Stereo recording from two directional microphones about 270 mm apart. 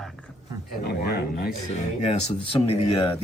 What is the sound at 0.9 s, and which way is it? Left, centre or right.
Speech, left.